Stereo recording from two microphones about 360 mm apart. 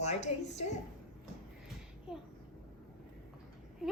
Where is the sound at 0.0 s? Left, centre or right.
Centre.